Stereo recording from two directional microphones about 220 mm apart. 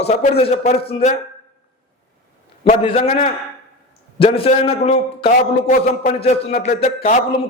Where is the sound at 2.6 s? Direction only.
25° left (ahead or behind).